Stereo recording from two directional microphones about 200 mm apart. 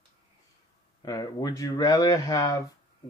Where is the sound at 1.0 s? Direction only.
20° left (ahead or behind).